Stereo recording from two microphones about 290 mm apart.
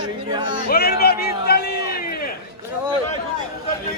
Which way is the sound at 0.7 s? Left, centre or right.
Left.